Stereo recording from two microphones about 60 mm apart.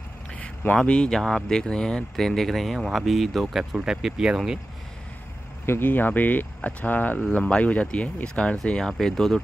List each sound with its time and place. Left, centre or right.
0.3 s a sound: left
0.8 s speech: centre
5.7 s speech: left; by 9.4 s centre